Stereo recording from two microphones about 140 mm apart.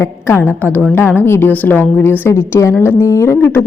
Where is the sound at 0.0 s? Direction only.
20° left (ahead or behind).